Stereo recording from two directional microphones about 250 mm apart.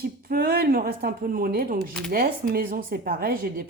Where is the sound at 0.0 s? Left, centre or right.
Right.